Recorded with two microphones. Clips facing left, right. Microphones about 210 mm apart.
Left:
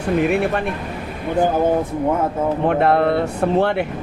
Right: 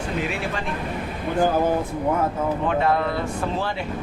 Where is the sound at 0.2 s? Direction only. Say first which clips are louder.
Left 10 dB; 55° left (ahead or behind).